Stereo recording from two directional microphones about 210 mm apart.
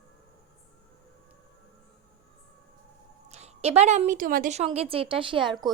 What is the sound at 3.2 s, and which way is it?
A woman's voice, 30° right (ahead or behind).